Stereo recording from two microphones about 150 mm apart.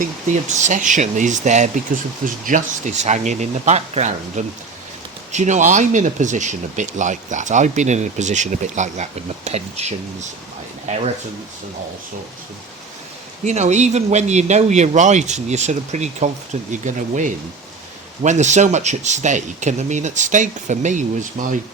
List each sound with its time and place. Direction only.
0.4 s speech: 55° right (ahead or behind)
2.2 s speech: 60° right (ahead or behind); by 10.2 s 45° right (ahead or behind)
13.4 s speech: 50° right (ahead or behind)